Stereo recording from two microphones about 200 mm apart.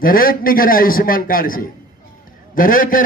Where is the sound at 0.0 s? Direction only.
45° left (ahead or behind).